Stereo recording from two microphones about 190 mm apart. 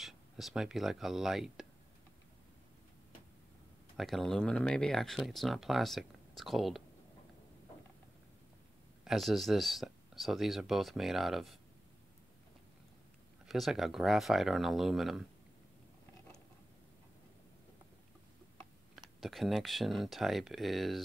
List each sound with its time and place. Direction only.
0.0 s speech: centre (ahead or behind)
3.9 s speech: centre (ahead or behind)
9.0 s speech: centre (ahead or behind)
13.5 s speech: centre (ahead or behind)
18.9 s speech: centre (ahead or behind)